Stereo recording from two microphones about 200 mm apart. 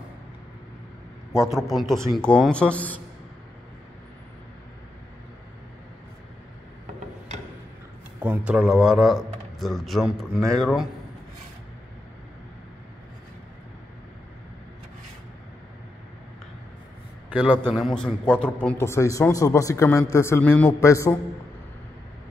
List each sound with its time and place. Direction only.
1.3 s a man's voice: centre (ahead or behind)
8.2 s a man's voice: 5° right (ahead or behind)
17.3 s a man's voice: 5° right (ahead or behind); by 21.2 s 15° left (ahead or behind)